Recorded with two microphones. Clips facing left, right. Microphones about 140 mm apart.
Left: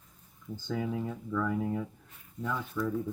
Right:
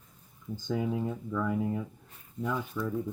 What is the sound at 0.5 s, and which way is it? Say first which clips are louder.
Speech: right 2 dB; 15° right (ahead or behind).